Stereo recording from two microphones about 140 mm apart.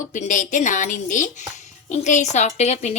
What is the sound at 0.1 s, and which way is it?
Speech, 65° left (ahead or behind).